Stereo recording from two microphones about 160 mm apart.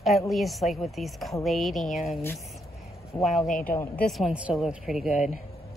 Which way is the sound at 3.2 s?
Centre (ahead or behind).